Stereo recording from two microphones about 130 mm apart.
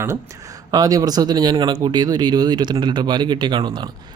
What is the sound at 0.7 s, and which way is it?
Speech, 30° right (ahead or behind).